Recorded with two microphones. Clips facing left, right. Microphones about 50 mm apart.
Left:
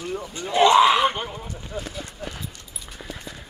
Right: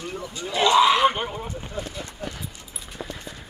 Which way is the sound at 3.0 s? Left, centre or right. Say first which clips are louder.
Right 3 dB; centre.